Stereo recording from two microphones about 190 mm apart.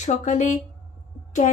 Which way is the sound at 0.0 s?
40° left (ahead or behind).